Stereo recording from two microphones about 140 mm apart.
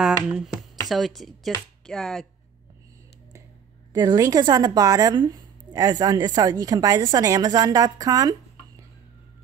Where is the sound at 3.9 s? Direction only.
25° right (ahead or behind).